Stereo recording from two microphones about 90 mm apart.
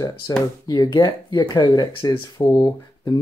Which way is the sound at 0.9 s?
55° left (ahead or behind).